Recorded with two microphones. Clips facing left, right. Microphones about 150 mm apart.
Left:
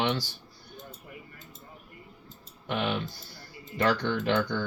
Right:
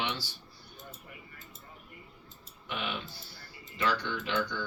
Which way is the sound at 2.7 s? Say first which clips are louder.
Left 7 dB; 55° left (ahead or behind).